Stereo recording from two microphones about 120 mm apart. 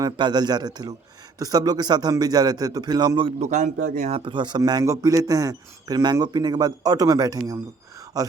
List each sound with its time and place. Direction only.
0.0 s speech: 35° right (ahead or behind)
3.4 s a man's voice: 85° right
4.1 s speech: 40° right (ahead or behind)